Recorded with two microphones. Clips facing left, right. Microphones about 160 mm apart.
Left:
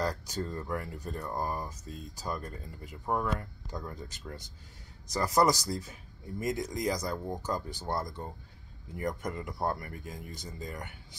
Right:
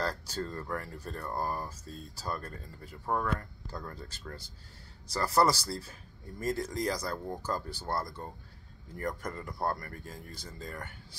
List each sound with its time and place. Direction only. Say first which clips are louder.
0.0 s speech: left 1 dB; 15° left (ahead or behind)